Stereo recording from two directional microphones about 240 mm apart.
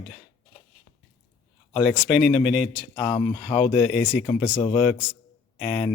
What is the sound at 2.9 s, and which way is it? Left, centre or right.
Speech, centre.